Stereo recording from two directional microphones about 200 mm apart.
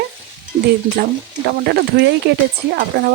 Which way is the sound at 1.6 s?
55° right (ahead or behind).